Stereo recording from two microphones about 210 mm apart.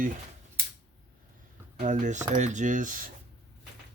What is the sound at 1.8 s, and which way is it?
Speech, 35° right (ahead or behind).